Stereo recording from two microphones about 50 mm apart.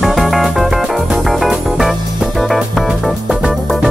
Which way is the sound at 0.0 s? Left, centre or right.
Centre.